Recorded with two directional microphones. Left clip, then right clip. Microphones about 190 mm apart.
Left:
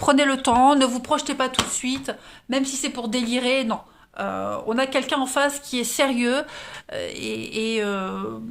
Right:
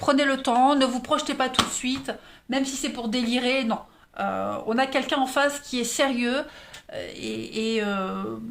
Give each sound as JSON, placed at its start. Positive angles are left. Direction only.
{"t": 0.0, "sound": "speech", "side_deg": 35}